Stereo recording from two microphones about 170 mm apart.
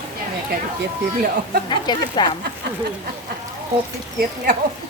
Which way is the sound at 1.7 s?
25° left (ahead or behind).